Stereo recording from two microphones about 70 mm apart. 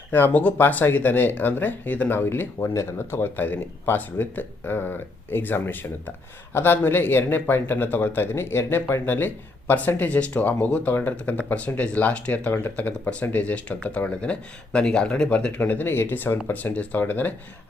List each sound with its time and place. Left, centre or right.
0.1 s speech: left